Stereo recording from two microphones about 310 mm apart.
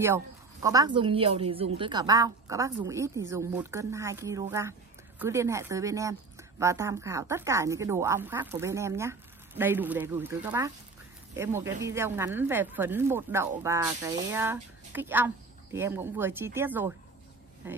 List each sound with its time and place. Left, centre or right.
0.0 s speech: centre